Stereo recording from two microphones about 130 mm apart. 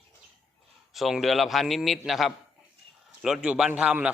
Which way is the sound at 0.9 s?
Centre (ahead or behind).